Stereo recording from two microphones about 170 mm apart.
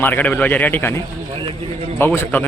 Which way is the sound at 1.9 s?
10° left (ahead or behind).